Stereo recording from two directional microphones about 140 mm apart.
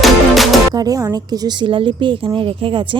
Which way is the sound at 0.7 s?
25° right (ahead or behind).